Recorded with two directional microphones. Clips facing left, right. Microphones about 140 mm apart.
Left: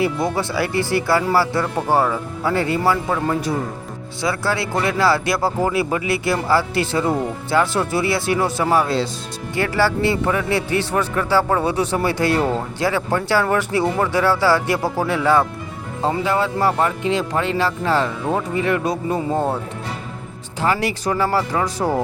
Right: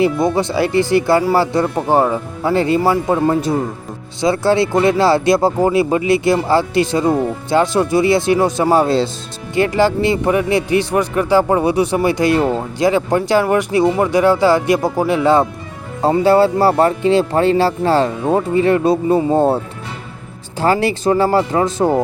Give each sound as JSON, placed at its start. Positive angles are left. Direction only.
{"t": 0.3, "sound": "a man's voice", "side_deg": -20}
{"t": 16.0, "sound": "speech", "side_deg": -35}
{"t": 20.6, "sound": "speech", "side_deg": -30}